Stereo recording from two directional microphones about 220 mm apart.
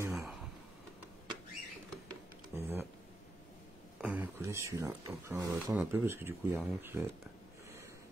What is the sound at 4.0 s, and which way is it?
Speech, 5° right (ahead or behind).